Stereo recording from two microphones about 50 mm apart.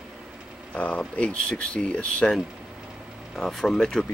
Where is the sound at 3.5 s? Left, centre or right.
Centre.